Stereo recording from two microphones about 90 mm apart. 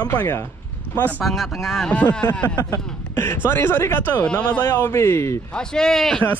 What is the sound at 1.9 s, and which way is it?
Speech, 15° left (ahead or behind).